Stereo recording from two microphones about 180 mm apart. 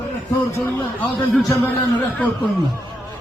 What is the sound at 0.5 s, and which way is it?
A man's voice, 15° left (ahead or behind).